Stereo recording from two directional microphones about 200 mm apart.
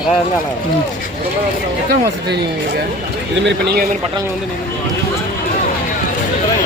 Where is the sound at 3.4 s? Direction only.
55° right (ahead or behind).